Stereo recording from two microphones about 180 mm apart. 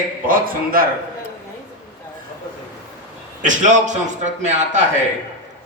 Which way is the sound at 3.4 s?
45° right (ahead or behind).